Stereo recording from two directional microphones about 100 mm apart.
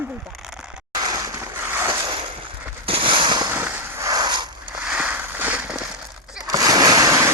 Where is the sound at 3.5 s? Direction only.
20° right (ahead or behind).